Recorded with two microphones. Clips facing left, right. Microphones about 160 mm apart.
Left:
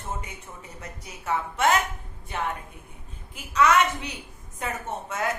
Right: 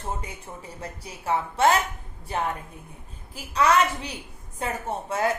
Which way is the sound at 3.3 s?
35° right (ahead or behind).